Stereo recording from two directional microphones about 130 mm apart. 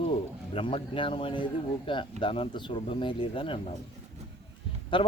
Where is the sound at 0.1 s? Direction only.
45° left (ahead or behind).